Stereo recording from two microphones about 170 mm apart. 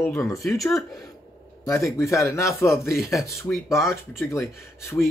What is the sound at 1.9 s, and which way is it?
Speech, 15° left (ahead or behind).